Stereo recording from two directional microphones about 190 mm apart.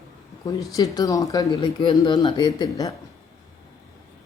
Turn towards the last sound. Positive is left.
turn(degrees=20)  # may be behind; listen again after turning